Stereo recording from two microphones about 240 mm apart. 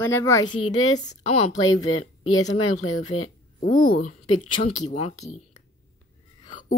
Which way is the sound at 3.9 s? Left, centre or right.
Left.